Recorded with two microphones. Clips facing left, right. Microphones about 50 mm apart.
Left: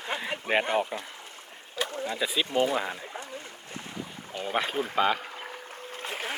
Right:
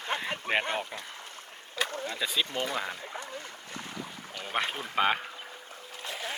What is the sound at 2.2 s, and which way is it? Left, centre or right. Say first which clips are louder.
Speech: left 1 dB; centre.